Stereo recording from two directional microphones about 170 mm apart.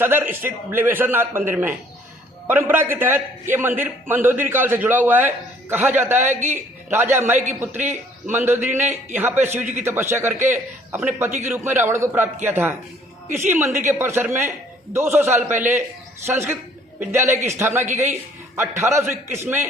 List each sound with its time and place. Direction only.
0.0 s a man's voice: 10° right (ahead or behind)